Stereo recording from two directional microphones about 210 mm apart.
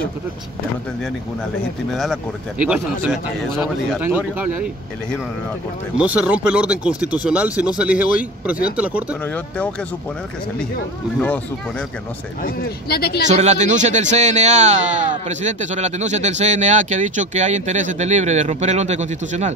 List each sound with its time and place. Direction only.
3.3 s speech: centre (ahead or behind)
5.9 s speech: 5° right (ahead or behind)
9.2 s speech: 5° left (ahead or behind)
11.1 s speech: 10° left (ahead or behind)
12.4 s speech: 50° left (ahead or behind)
13.3 s speech: 35° right (ahead or behind)